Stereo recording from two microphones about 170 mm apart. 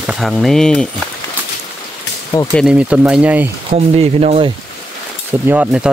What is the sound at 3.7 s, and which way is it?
Speech, 35° right (ahead or behind).